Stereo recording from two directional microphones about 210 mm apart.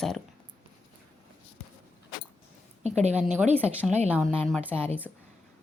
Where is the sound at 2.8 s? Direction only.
30° right (ahead or behind).